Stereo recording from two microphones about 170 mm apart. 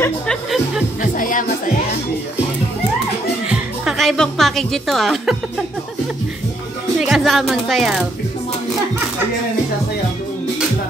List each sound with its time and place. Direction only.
1.1 s music: 50° left (ahead or behind)
3.4 s a woman's voice: 5° right (ahead or behind)
7.0 s speech: centre (ahead or behind)